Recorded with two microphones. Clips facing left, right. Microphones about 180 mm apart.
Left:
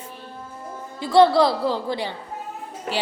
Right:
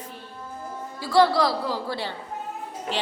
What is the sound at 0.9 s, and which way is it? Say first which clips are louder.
A woman's voice: left 4 dB; 20° left (ahead or behind).